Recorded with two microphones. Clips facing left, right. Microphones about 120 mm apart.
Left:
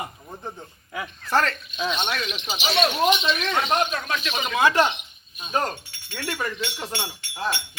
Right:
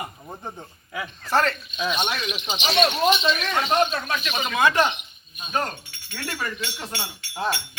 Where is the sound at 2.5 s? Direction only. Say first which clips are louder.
Right 2 dB; 5° left (ahead or behind).